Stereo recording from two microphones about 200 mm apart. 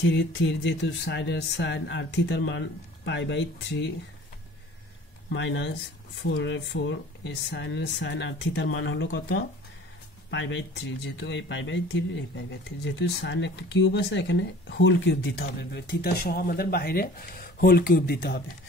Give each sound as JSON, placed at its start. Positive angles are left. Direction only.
{"t": 0.0, "sound": "speech", "side_deg": 65}
{"t": 5.3, "sound": "speech", "side_deg": 65}